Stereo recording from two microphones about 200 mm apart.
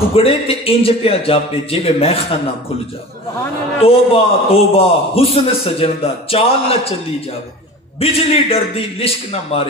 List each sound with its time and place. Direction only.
0.1 s a man's voice: 30° left (ahead or behind)
3.8 s a man's voice: 30° left (ahead or behind)
8.0 s a man's voice: 30° left (ahead or behind)